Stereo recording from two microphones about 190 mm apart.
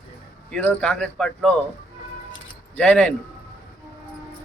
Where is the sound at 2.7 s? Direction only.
5° left (ahead or behind).